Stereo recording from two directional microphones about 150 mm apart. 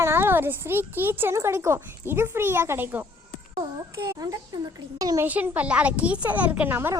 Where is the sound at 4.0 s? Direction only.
25° right (ahead or behind).